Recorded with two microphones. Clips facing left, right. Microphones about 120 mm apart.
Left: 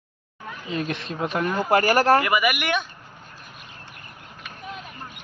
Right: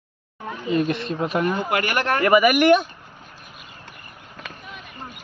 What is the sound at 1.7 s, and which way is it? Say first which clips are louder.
Speech: left 5 dB; 35° left (ahead or behind).